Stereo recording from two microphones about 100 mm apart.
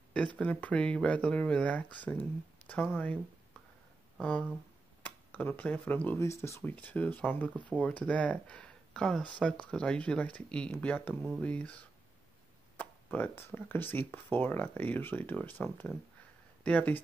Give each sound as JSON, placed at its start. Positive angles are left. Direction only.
{"t": 0.4, "sound": "speech", "side_deg": 15}
{"t": 4.2, "sound": "speech", "side_deg": 10}
{"t": 16.6, "sound": "speech", "side_deg": 15}